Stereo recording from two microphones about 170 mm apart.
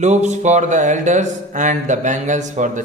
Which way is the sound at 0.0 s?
45° right (ahead or behind).